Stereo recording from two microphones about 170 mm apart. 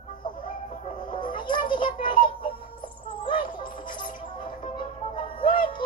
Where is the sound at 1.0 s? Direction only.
30° left (ahead or behind).